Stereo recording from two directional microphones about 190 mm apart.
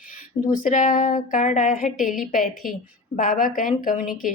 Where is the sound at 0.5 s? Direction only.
45° left (ahead or behind).